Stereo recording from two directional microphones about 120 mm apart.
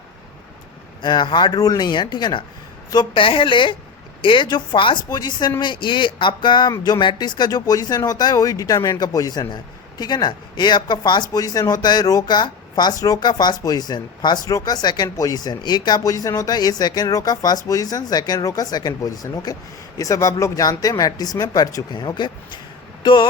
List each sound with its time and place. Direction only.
1.0 s a woman's voice: 40° left (ahead or behind)